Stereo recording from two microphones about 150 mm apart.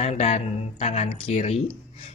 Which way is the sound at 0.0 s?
45° left (ahead or behind).